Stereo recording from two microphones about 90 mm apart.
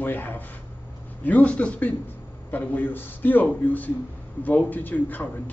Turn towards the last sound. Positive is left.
turn(degrees=20)  # may be behind; listen again after turning